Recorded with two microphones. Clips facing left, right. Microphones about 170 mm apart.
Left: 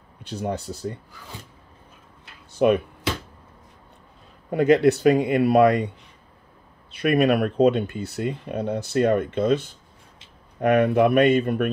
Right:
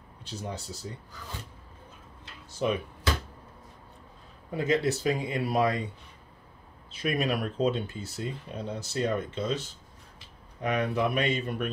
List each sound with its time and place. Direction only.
0.2 s speech: 60° left (ahead or behind)
2.6 s speech: 65° left (ahead or behind)
4.5 s speech: 65° left (ahead or behind)
6.9 s speech: 65° left (ahead or behind)